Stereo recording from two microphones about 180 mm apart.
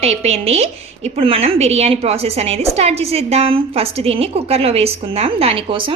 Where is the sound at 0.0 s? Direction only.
35° right (ahead or behind).